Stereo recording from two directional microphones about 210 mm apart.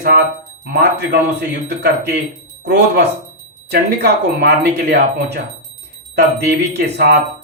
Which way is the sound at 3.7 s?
50° right (ahead or behind).